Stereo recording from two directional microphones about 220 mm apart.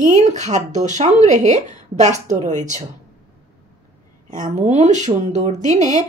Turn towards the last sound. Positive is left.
turn(degrees=-30)  # may be behind; listen again after turning